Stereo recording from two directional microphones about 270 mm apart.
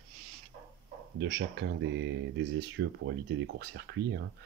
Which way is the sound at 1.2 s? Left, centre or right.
Right.